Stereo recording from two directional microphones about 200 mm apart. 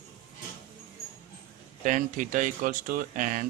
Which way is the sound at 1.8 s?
40° right (ahead or behind).